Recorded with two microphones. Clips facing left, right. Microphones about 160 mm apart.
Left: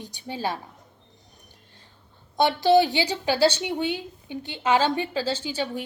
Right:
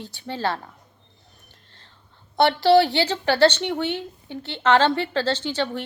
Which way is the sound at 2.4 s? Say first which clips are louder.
Right 2 dB; 15° left (ahead or behind).